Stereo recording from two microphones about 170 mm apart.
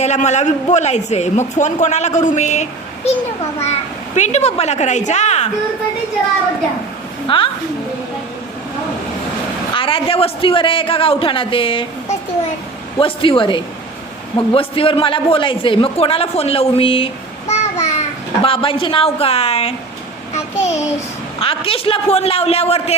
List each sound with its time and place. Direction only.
0.0 s a man's voice: 40° left (ahead or behind)
7.3 s a man's voice: 30° left (ahead or behind)
9.7 s a man's voice: 30° left (ahead or behind)
17.5 s a sound: 40° left (ahead or behind)
18.4 s a man's voice: 30° left (ahead or behind)
21.4 s a man's voice: 35° left (ahead or behind)